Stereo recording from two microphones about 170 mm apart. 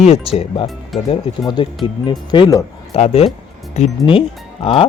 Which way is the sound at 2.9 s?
35° left (ahead or behind).